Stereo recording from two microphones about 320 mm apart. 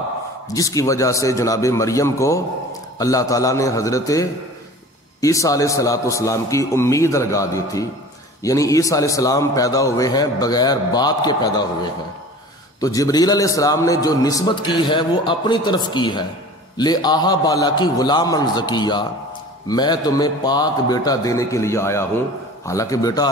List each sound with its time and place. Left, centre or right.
0.5 s a man's voice: centre